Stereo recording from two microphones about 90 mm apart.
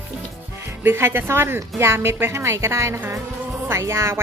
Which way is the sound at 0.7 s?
30° right (ahead or behind).